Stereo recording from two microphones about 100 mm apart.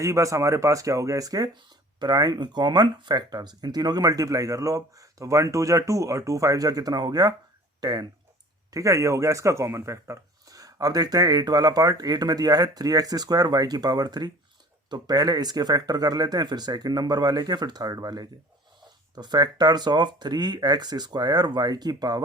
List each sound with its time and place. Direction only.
0.0 s speech: 30° right (ahead or behind)